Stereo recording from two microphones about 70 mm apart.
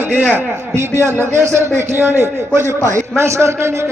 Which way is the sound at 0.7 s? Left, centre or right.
Right.